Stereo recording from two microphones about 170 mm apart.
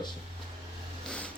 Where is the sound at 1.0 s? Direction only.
5° left (ahead or behind).